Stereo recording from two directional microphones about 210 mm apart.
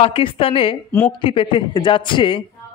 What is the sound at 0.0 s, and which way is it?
A man's voice, 25° left (ahead or behind).